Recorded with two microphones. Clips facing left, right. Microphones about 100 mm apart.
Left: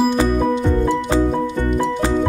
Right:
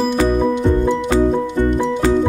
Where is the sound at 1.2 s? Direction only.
20° right (ahead or behind).